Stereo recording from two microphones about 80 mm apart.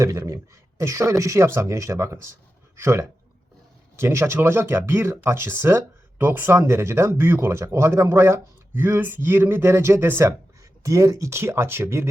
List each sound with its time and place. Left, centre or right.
0.0 s speech: right